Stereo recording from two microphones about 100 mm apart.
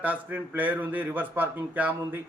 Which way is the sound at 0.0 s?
15° right (ahead or behind).